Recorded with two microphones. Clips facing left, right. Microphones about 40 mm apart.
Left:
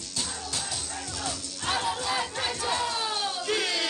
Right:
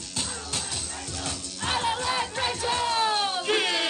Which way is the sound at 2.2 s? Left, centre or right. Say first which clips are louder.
Right 2 dB; right.